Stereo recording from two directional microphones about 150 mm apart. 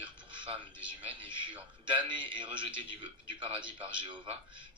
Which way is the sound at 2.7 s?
35° right (ahead or behind).